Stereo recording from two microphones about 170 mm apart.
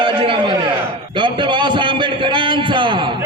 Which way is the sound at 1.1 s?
30° right (ahead or behind).